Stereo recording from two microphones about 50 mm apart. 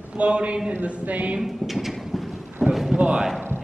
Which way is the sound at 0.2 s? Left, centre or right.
Right.